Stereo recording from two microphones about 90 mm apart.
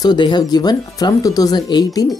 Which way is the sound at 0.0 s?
55° left (ahead or behind).